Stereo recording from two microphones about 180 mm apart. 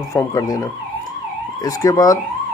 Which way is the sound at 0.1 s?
15° left (ahead or behind).